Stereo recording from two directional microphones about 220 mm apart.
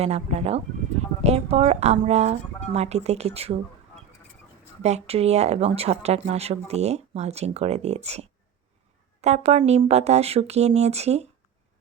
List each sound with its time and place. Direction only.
0.0 s speech: 30° right (ahead or behind)
4.8 s speech: 30° right (ahead or behind)